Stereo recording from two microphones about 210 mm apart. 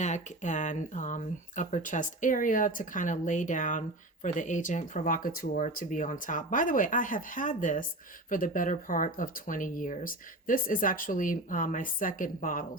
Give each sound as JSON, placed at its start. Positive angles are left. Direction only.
{"t": 0.0, "sound": "speech", "side_deg": 35}